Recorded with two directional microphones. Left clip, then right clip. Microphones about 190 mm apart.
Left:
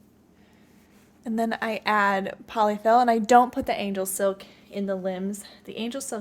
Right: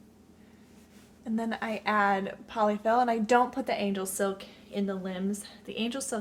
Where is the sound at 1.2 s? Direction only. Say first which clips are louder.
Left 6 dB; 45° left (ahead or behind).